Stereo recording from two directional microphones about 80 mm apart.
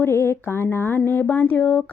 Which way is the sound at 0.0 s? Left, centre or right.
Left.